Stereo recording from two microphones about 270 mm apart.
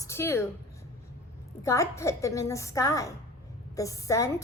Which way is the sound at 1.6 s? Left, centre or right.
Centre.